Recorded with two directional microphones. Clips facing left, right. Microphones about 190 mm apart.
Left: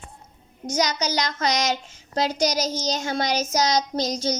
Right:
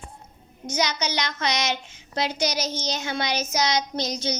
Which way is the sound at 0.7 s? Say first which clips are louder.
Left 2 dB; 40° left (ahead or behind).